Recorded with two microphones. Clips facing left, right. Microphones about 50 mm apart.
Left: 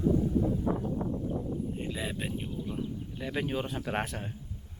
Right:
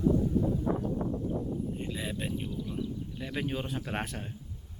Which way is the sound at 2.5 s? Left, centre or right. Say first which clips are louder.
Even; left.